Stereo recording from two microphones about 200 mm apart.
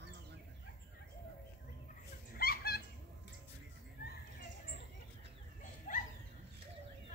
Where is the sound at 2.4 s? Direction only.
50° left (ahead or behind).